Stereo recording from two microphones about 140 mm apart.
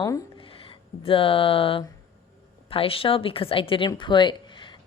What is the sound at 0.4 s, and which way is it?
A woman's voice, 40° left (ahead or behind).